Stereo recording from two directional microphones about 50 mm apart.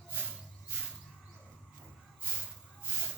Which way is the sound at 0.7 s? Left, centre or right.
Right.